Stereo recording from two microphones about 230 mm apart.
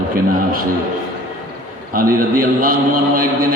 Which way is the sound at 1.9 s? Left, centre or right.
Right.